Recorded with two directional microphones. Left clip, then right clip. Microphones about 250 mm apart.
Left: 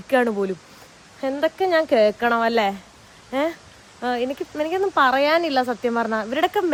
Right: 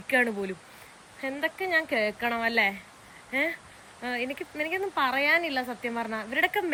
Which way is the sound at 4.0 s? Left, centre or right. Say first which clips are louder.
Left 8 dB; centre.